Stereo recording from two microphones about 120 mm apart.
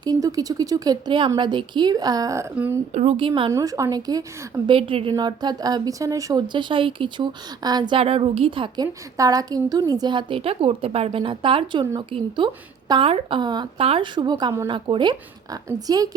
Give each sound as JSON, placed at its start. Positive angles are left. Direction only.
{"t": 0.0, "sound": "speech", "side_deg": -30}
{"t": 2.9, "sound": "a woman's voice", "side_deg": -65}
{"t": 3.2, "sound": "a woman's voice", "side_deg": -45}
{"t": 3.5, "sound": "speech", "side_deg": -30}
{"t": 4.6, "sound": "a woman's voice", "side_deg": -45}
{"t": 5.1, "sound": "speech", "side_deg": -35}
{"t": 6.5, "sound": "speech", "side_deg": -40}
{"t": 7.9, "sound": "a woman's voice", "side_deg": -50}
{"t": 13.4, "sound": "speech", "side_deg": -40}
{"t": 13.7, "sound": "speech", "side_deg": -50}